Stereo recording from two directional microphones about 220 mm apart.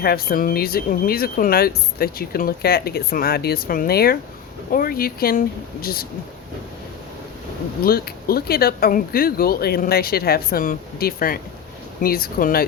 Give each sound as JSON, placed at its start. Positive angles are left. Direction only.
{"t": 0.0, "sound": "speech", "side_deg": 45}
{"t": 7.9, "sound": "speech", "side_deg": 45}